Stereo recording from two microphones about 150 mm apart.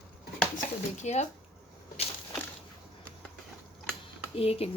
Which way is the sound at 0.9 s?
50° left (ahead or behind).